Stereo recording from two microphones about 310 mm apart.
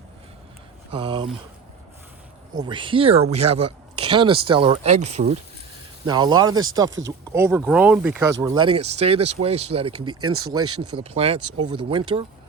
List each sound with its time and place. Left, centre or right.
0.9 s speech: centre
2.6 s speech: centre
10.2 s speech: right
11.0 s speech: centre
11.3 s speech: right
11.9 s speech: centre